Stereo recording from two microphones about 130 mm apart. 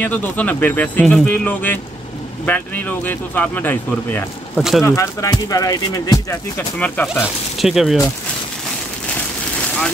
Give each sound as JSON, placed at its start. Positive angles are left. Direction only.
{"t": 0.0, "sound": "speech", "side_deg": 10}
{"t": 4.6, "sound": "speech", "side_deg": 0}
{"t": 4.8, "sound": "speech", "side_deg": 25}
{"t": 6.8, "sound": "speech", "side_deg": 15}
{"t": 7.5, "sound": "speech", "side_deg": 0}